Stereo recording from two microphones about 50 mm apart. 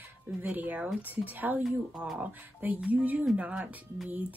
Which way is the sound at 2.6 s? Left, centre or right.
Right.